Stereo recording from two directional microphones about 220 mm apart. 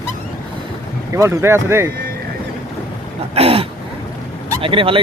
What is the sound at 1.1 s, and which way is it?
Speech, 10° right (ahead or behind).